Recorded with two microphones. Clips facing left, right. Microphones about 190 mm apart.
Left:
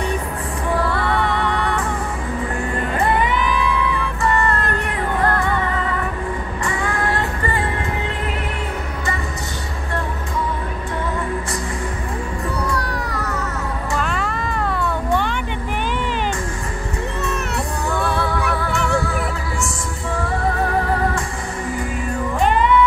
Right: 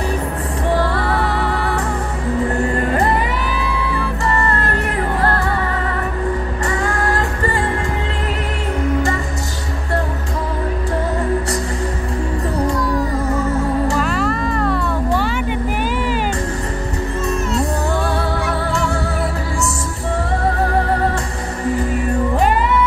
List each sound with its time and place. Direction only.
1.1 s music: 5° right (ahead or behind)
2.9 s music: 40° right (ahead or behind)
6.6 s music: 40° right (ahead or behind)
12.7 s music: 70° left (ahead or behind)
13.9 s music: centre (ahead or behind)